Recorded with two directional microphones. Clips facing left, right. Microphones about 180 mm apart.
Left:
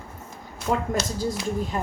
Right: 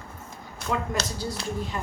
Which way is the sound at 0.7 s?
55° left (ahead or behind).